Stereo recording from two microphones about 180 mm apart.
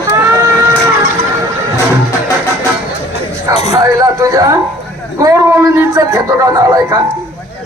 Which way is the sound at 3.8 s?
20° right (ahead or behind).